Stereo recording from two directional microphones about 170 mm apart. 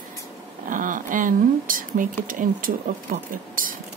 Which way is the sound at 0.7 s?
50° right (ahead or behind).